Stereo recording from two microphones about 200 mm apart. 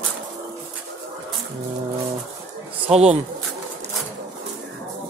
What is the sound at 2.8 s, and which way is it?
Speech, 30° right (ahead or behind).